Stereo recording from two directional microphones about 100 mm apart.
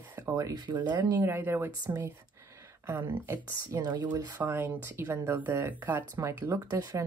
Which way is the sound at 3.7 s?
40° right (ahead or behind).